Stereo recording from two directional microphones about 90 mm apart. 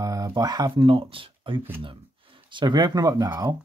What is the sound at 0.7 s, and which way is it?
Speech, 75° right (ahead or behind).